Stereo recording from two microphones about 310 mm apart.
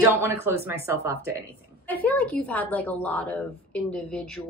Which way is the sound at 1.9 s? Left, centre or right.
Centre.